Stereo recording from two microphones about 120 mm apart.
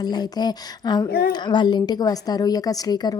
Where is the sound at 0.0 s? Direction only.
35° left (ahead or behind).